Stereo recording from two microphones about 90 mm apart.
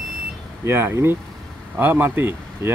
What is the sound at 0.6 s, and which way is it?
Speech, 25° right (ahead or behind).